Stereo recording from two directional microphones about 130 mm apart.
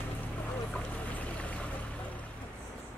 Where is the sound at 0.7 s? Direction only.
10° left (ahead or behind).